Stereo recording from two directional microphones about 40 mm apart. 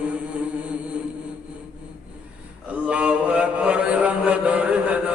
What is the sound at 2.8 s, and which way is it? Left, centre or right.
Mantra, right.